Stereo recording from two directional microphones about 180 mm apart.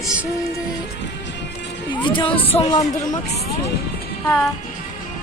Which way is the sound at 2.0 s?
25° left (ahead or behind).